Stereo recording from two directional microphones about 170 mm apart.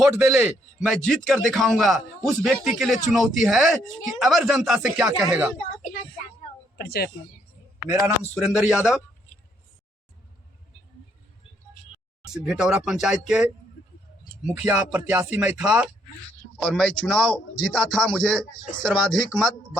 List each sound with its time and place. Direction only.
0.2 s speech: 5° right (ahead or behind)
6.7 s speech: 65° left (ahead or behind)
7.9 s speech: 20° right (ahead or behind)
8.4 s speech: 5° right (ahead or behind)
8.8 s speech: 15° left (ahead or behind)
12.3 s speech: 5° right (ahead or behind)
16.6 s speech: 5° left (ahead or behind)